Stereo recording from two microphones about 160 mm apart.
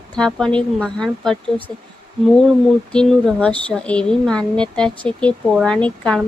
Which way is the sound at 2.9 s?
5° left (ahead or behind).